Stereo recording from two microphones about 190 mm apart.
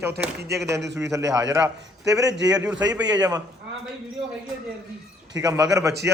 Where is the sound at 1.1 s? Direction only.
20° right (ahead or behind).